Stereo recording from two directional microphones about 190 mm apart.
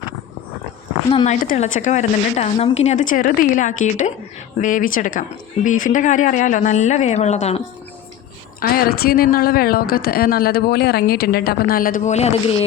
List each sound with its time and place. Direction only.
1.1 s a woman's voice: 35° left (ahead or behind)
8.6 s a woman's voice: 50° left (ahead or behind)